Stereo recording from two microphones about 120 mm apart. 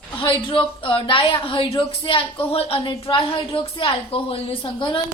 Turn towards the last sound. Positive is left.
turn(degrees=40)  # may be behind; listen again after turning